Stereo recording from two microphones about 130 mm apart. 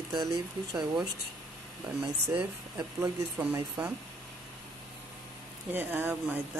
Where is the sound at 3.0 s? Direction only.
15° right (ahead or behind).